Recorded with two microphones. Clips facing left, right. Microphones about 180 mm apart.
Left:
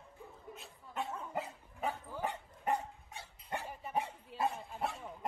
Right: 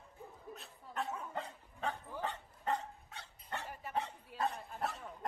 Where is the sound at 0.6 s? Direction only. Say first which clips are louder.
Left 1 dB; centre (ahead or behind).